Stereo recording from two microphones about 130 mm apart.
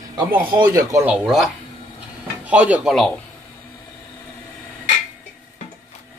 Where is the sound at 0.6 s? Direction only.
25° right (ahead or behind).